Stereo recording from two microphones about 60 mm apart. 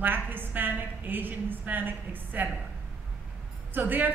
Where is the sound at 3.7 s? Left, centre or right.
Right.